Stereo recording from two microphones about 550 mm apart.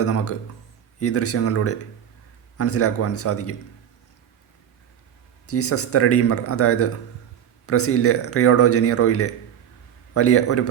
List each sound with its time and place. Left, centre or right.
0.0 s a man's voice: left
5.5 s a man's voice: left